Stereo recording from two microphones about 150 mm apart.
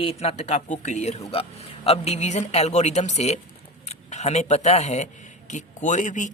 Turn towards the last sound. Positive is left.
turn(degrees=55)  # may be behind; listen again after turning